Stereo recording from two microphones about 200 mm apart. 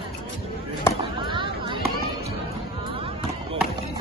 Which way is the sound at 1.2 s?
25° right (ahead or behind).